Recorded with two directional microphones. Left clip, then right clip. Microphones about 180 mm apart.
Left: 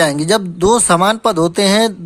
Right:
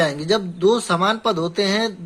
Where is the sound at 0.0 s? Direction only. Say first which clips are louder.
Left 6 dB; 45° left (ahead or behind).